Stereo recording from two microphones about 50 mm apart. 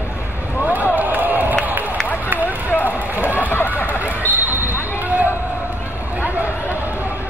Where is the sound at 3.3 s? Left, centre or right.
Left.